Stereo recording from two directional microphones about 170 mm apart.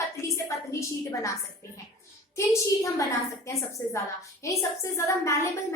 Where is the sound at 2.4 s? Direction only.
20° left (ahead or behind).